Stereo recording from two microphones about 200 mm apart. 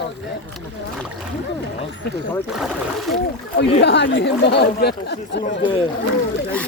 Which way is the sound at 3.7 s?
55° left (ahead or behind).